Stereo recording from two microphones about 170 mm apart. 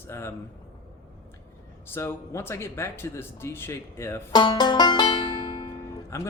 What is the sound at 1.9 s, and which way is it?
Speech, 15° left (ahead or behind).